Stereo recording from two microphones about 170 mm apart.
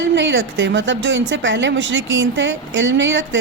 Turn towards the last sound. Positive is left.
turn(degrees=-90)